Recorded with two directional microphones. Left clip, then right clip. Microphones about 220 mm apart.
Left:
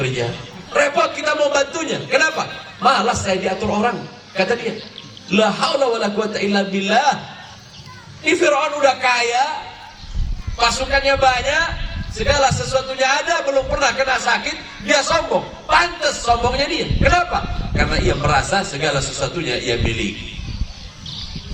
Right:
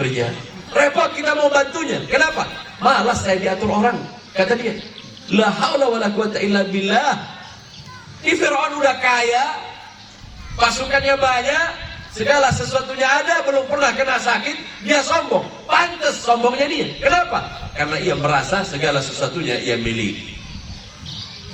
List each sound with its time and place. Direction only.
0.7 s a man's voice: 50° left (ahead or behind)
5.3 s a man's voice: 50° left (ahead or behind)
8.2 s a man's voice: 50° left (ahead or behind)
10.6 s a man's voice: 45° left (ahead or behind)